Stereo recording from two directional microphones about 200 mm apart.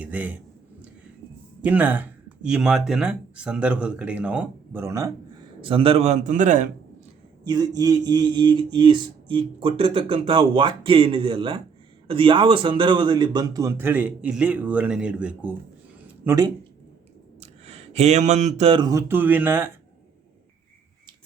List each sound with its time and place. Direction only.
0.0 s speech: 10° right (ahead or behind)
1.6 s speech: 10° right (ahead or behind)
5.6 s a man's voice: 25° right (ahead or behind)
7.4 s a man's voice: 20° right (ahead or behind)
16.0 s a sound: 15° right (ahead or behind)
17.4 s speech: 35° right (ahead or behind); by 19.7 s 10° right (ahead or behind)